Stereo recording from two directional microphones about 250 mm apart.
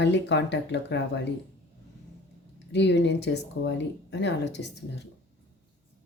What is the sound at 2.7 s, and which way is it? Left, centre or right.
Speech, left.